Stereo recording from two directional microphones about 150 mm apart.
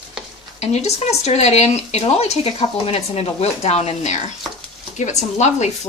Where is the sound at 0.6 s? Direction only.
45° left (ahead or behind).